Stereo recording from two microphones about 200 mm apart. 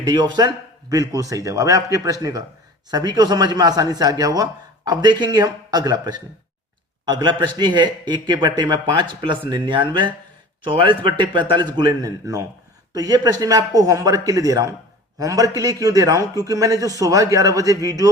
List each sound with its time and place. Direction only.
0.0 s a man's voice: 20° right (ahead or behind)